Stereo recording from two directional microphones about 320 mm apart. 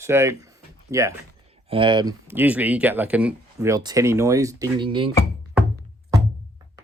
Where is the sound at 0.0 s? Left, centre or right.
Centre.